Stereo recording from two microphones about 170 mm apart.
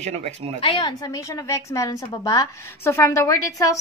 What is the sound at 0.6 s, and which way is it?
A woman's voice, 30° left (ahead or behind).